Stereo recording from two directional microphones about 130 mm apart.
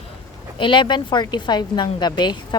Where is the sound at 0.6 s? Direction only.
40° left (ahead or behind).